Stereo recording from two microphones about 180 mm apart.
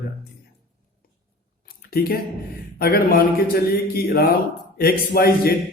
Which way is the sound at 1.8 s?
55° left (ahead or behind).